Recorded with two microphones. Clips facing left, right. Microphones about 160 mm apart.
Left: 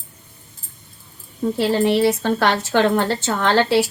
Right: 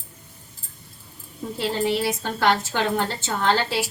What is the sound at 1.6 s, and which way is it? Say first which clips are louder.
A woman's voice: left 6 dB; 70° left (ahead or behind).